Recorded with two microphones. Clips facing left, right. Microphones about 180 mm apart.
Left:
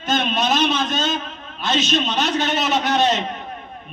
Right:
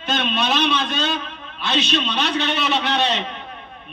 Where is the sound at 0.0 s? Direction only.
45° left (ahead or behind).